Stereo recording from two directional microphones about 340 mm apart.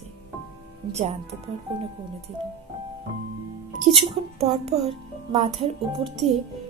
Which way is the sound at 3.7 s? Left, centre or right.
Centre.